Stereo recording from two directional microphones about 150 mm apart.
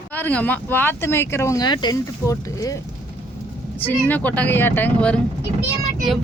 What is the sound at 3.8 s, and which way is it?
A woman's voice, 10° left (ahead or behind).